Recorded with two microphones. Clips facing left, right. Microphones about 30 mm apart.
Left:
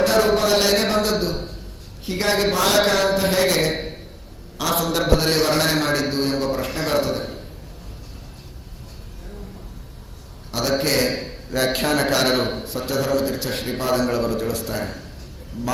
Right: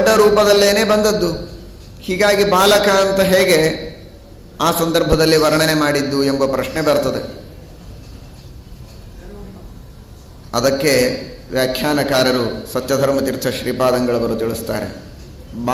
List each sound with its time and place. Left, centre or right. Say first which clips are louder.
0.0 s a man's voice: right 6 dB; right
10.5 s a man's voice: right 6 dB; right
11.5 s a man's voice: right 4 dB; right
12.6 s a man's voice: right 7 dB; right
14.2 s a man's voice: right 4 dB; right
14.5 s a man's voice: right 4 dB; right